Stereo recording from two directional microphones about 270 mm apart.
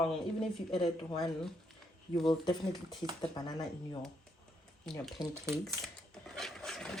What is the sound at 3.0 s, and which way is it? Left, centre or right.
Speech, centre.